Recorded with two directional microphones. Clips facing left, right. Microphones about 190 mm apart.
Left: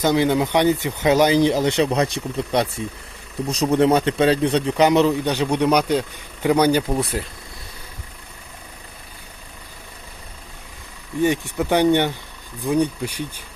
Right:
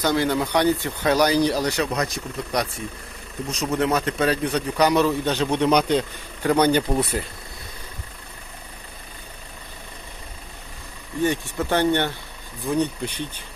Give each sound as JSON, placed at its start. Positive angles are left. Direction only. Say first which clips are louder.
{"t": 0.0, "sound": "a man's voice", "louder": "left 4 dB", "side_deg": 20}
{"t": 11.2, "sound": "a man's voice", "louder": "left 3 dB", "side_deg": 15}